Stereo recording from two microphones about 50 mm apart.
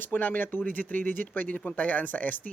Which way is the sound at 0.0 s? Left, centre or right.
Left.